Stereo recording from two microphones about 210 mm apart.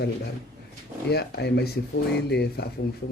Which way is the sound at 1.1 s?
50° left (ahead or behind).